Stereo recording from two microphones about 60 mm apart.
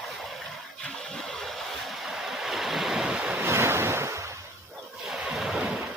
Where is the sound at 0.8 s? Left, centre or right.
Centre.